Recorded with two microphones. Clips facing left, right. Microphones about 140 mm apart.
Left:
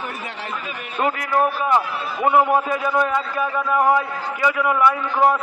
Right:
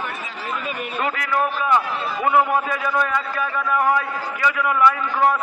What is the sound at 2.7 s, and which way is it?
A man's voice, 20° left (ahead or behind).